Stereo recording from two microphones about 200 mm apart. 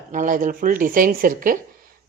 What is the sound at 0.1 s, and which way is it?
A woman's voice, 40° right (ahead or behind).